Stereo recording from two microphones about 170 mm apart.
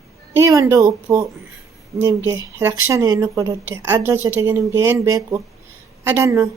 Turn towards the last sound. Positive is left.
turn(degrees=-15)  # may be behind; listen again after turning